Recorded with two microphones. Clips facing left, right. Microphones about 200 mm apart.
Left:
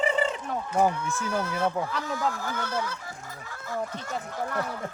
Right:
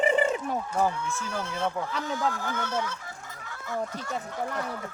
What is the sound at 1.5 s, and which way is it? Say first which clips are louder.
Speech: left 2 dB; 5° left (ahead or behind).